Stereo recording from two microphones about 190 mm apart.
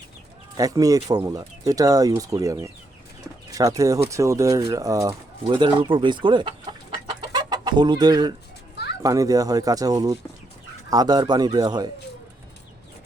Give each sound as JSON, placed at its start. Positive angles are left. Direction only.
{"t": 0.5, "sound": "speech", "side_deg": -20}
{"t": 7.2, "sound": "chicken", "side_deg": -20}
{"t": 8.7, "sound": "children playing", "side_deg": 60}
{"t": 9.0, "sound": "speech", "side_deg": -20}